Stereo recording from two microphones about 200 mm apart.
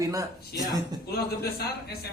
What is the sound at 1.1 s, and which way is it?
Speech, 50° left (ahead or behind).